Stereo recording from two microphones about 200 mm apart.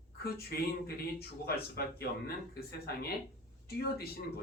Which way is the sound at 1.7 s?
50° left (ahead or behind).